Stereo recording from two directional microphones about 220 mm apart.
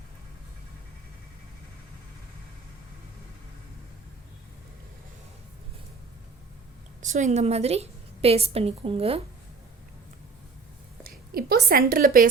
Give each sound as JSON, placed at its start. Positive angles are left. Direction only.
{"t": 7.0, "sound": "a woman's voice", "side_deg": -35}
{"t": 11.3, "sound": "a woman's voice", "side_deg": -45}